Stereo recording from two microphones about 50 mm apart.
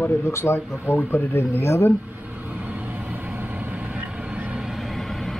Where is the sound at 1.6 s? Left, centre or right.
Left.